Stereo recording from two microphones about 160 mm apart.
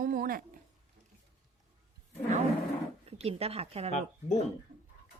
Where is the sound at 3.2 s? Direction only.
40° right (ahead or behind).